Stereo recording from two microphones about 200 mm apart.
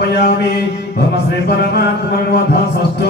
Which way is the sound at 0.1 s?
55° left (ahead or behind).